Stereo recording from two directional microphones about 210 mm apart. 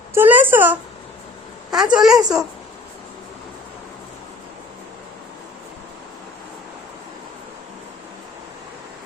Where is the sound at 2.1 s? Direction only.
15° right (ahead or behind).